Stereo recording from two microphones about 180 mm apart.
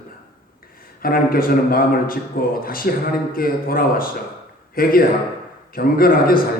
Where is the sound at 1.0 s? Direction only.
55° left (ahead or behind).